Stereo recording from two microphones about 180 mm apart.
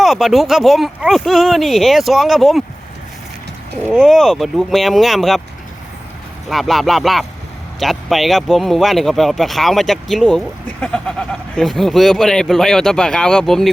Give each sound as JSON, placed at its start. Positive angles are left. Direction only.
{"t": 0.0, "sound": "speech", "side_deg": 0}
{"t": 3.8, "sound": "speech", "side_deg": 0}
{"t": 6.5, "sound": "speech", "side_deg": 0}